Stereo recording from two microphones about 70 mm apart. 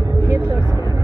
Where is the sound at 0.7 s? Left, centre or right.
Right.